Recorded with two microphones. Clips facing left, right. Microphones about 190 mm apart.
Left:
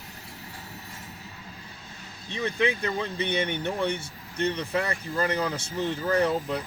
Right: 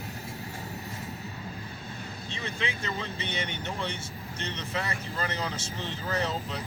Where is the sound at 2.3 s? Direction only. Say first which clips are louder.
Left 9 dB; 55° left (ahead or behind).